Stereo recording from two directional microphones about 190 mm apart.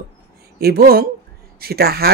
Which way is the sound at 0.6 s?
55° right (ahead or behind).